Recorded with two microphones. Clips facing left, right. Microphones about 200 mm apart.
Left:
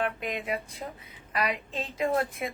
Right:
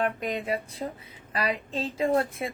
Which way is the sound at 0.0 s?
40° right (ahead or behind).